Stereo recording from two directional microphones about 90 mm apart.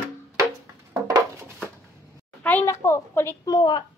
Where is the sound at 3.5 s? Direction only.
50° left (ahead or behind).